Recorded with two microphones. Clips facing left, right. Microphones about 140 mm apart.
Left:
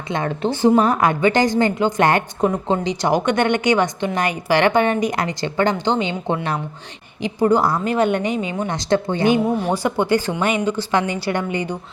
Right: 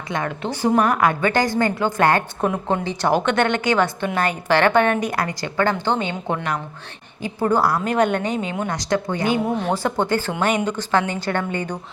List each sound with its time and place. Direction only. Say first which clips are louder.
0.1 s a woman's voice: left 4 dB; 30° left (ahead or behind)
7.2 s a woman's voice: left 3 dB; 15° left (ahead or behind)
8.6 s a woman's voice: left 5 dB; 25° left (ahead or behind)
9.6 s a woman's voice: left 2 dB; 10° left (ahead or behind)